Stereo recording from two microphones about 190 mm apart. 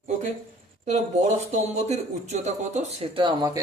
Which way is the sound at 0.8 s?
40° right (ahead or behind).